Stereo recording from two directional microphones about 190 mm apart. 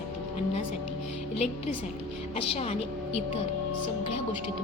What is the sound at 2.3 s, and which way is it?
Speech, 35° left (ahead or behind).